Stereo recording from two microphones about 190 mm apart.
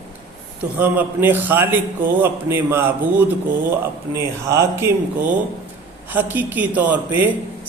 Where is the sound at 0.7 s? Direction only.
10° right (ahead or behind).